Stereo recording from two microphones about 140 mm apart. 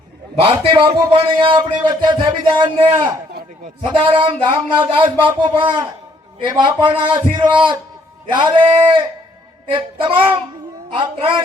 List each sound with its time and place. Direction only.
0.6 s a man's voice: 40° right (ahead or behind)